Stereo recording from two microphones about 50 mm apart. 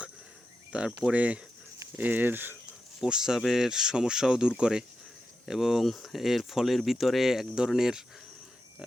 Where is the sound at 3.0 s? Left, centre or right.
Centre.